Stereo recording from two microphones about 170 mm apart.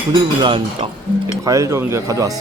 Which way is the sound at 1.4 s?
20° right (ahead or behind).